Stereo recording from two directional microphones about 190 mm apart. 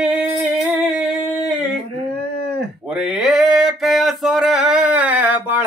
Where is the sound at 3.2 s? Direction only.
Centre (ahead or behind).